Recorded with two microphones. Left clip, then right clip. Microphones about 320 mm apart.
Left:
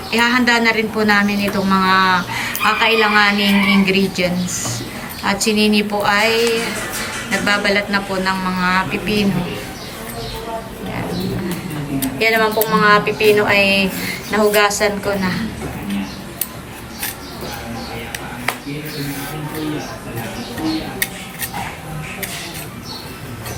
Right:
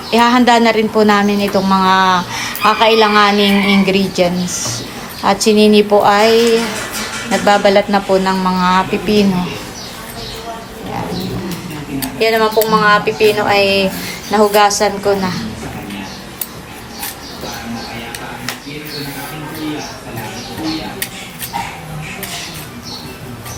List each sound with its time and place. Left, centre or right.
0.1 s a woman's voice: centre
12.2 s a woman's voice: centre